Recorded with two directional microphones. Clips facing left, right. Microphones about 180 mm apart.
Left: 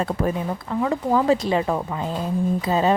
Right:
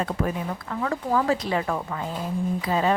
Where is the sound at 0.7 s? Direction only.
20° left (ahead or behind).